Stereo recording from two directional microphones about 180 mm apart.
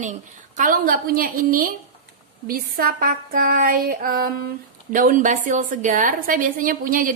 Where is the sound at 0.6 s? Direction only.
50° right (ahead or behind).